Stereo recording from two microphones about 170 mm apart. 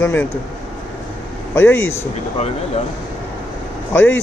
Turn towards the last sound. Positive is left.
turn(degrees=15)  # may be behind; listen again after turning